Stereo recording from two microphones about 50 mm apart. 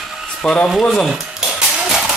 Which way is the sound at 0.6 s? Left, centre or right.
Centre.